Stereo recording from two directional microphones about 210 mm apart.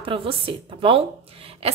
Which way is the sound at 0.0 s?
25° right (ahead or behind).